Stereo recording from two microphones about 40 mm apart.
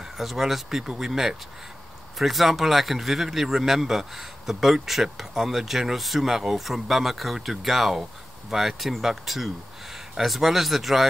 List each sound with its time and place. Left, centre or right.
0.2 s speech: centre